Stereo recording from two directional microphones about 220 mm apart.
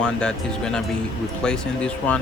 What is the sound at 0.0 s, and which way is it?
Speech, 5° left (ahead or behind).